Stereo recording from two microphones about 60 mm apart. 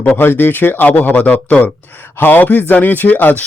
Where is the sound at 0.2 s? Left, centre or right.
Left.